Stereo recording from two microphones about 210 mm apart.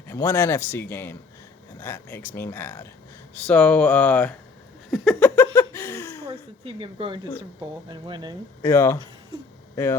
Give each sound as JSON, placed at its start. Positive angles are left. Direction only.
{"t": 0.1, "sound": "a man's voice", "side_deg": 10}
{"t": 4.9, "sound": "a sound", "side_deg": 0}
{"t": 5.4, "sound": "laughter", "side_deg": 10}
{"t": 6.2, "sound": "speech", "side_deg": -25}
{"t": 8.6, "sound": "a man's voice", "side_deg": 10}